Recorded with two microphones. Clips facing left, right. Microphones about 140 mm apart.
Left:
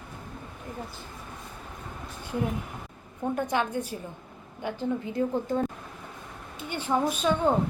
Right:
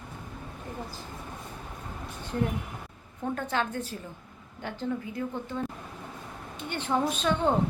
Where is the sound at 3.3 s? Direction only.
15° left (ahead or behind).